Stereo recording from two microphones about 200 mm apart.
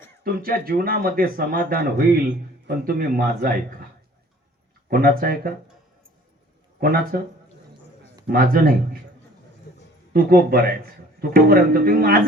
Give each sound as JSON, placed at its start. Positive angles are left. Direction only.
{"t": 0.3, "sound": "speech", "side_deg": -45}
{"t": 4.9, "sound": "speech", "side_deg": -45}
{"t": 6.7, "sound": "a man's voice", "side_deg": -50}
{"t": 8.3, "sound": "speech", "side_deg": -45}
{"t": 10.1, "sound": "speech", "side_deg": -50}